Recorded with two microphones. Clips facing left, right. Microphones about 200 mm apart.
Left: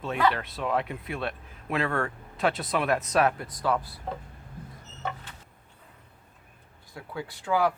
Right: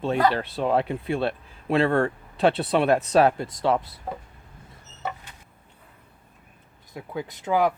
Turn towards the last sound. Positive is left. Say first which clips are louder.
# right 3 dB
turn(degrees=-20)  # may be behind; listen again after turning